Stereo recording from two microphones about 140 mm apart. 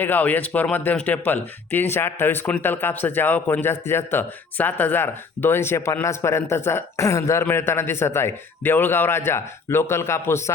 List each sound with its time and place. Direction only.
0.0 s speech: 10° left (ahead or behind)